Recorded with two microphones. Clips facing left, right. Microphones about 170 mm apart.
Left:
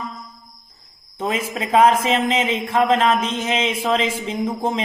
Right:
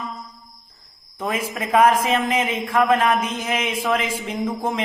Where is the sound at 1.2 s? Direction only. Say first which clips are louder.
Left 2 dB; 25° left (ahead or behind).